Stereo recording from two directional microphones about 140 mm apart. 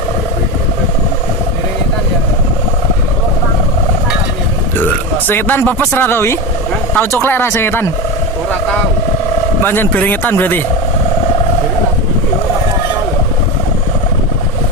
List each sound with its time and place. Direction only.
5.3 s speech: 15° left (ahead or behind)
9.6 s speech: 15° left (ahead or behind)